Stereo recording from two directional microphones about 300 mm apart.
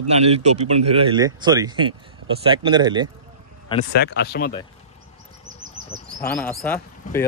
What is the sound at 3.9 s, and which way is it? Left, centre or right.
Speech, left.